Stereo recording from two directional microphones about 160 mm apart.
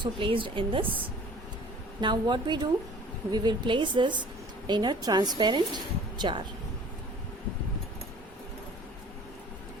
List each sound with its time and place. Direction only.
0.0 s a woman's voice: 30° right (ahead or behind)
2.0 s a woman's voice: 30° right (ahead or behind)